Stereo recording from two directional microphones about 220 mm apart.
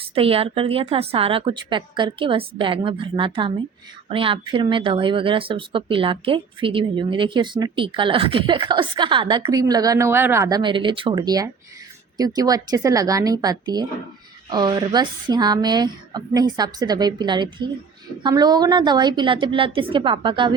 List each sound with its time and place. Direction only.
0.0 s speech: 25° right (ahead or behind)